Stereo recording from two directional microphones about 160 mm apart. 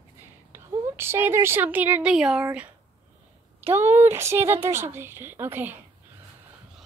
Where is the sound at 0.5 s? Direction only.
15° right (ahead or behind).